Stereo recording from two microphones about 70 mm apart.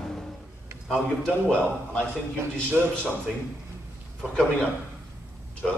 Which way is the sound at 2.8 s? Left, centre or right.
Right.